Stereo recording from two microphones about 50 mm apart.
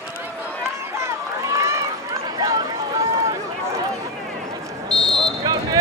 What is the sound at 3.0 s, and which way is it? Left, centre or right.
Run, right.